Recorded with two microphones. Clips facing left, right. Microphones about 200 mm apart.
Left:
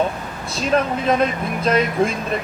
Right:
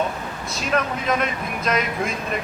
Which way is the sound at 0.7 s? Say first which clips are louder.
Left 5 dB; 35° left (ahead or behind).